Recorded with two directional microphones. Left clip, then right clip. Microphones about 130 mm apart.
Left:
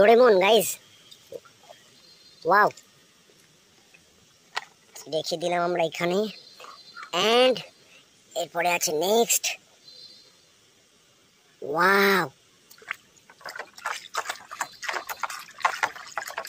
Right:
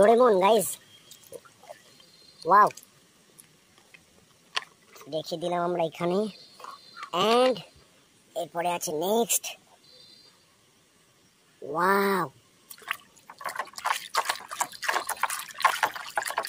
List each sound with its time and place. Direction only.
0.0 s speech: 5° left (ahead or behind)
4.9 s speech: 5° left (ahead or behind)
11.6 s speech: 10° left (ahead or behind)
13.3 s a sound: 25° right (ahead or behind)
14.1 s water: 30° right (ahead or behind)
15.0 s liquid: 25° right (ahead or behind)